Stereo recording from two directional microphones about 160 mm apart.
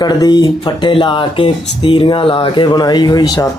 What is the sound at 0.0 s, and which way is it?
A man's voice, 25° left (ahead or behind).